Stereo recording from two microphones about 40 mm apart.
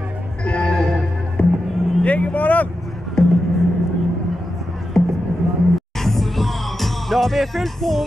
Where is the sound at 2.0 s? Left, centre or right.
Left.